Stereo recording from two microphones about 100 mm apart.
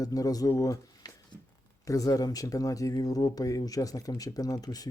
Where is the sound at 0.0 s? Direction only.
40° left (ahead or behind).